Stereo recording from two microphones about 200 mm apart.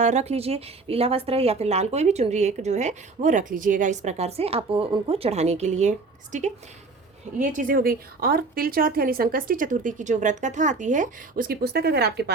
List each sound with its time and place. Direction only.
0.0 s a woman's voice: 35° right (ahead or behind); by 12.3 s 55° right (ahead or behind)